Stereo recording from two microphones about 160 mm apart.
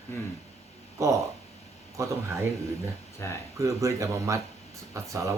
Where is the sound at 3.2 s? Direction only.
15° left (ahead or behind).